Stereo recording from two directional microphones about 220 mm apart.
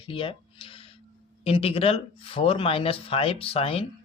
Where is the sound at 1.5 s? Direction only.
25° left (ahead or behind).